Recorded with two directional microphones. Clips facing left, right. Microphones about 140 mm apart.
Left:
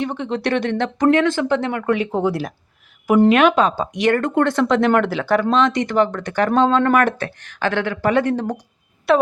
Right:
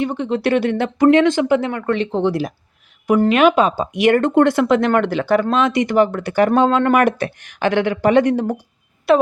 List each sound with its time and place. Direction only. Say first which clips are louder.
0.0 s speech: right 3 dB; centre (ahead or behind)
1.1 s speech: right 3 dB; 20° right (ahead or behind)
1.7 s speech: even; 5° left (ahead or behind)
4.1 s speech: right 5 dB; 20° right (ahead or behind)
4.5 s speech: right 1 dB; 5° right (ahead or behind)